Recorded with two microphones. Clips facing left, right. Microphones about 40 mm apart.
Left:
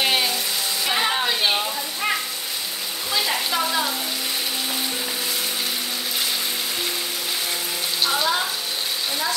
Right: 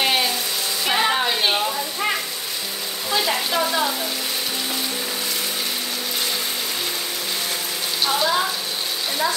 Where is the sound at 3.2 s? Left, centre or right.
Centre.